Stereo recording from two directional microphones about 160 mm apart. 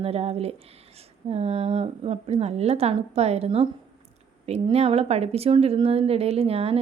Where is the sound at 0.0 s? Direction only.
40° right (ahead or behind).